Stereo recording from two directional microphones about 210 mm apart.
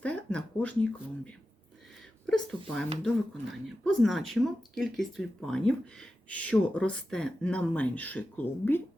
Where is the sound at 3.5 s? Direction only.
Centre (ahead or behind).